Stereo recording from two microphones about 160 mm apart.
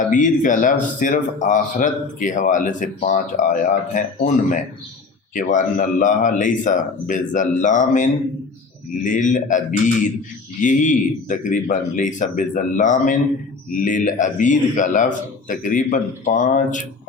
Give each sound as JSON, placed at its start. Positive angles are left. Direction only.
{"t": 0.1, "sound": "speech", "side_deg": 55}